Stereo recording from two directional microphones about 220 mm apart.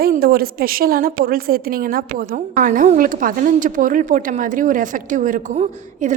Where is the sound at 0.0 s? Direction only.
45° right (ahead or behind).